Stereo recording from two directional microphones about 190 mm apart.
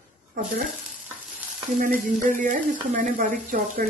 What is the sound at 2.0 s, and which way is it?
Speech, 45° right (ahead or behind).